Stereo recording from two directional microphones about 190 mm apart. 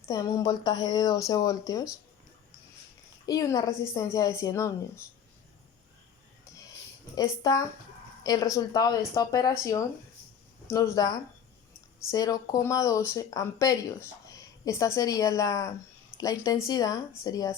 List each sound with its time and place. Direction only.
0.0 s speech: 15° left (ahead or behind)
3.2 s speech: 15° left (ahead or behind)
7.2 s speech: 20° left (ahead or behind)